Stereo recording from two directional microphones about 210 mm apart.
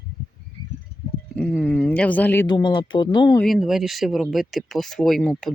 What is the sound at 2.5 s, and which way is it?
Speech, 20° left (ahead or behind).